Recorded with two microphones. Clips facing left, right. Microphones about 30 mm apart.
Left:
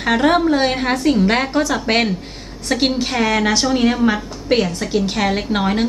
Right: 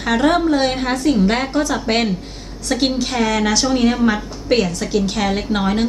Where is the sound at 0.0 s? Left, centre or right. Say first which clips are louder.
Left 1 dB; left.